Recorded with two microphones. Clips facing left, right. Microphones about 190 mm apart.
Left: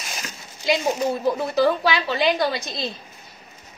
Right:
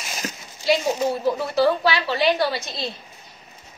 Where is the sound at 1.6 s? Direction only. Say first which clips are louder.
Right 2 dB; 15° left (ahead or behind).